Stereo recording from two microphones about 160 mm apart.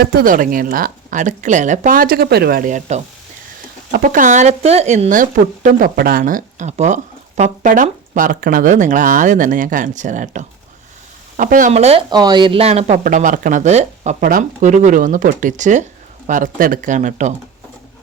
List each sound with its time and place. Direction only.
0.0 s a woman's voice: 70° right (ahead or behind); by 11.7 s 55° right (ahead or behind)
11.7 s speech: 40° right (ahead or behind)
12.1 s speech: 25° right (ahead or behind); by 14.2 s 45° right (ahead or behind)
14.2 s speech: 60° right (ahead or behind)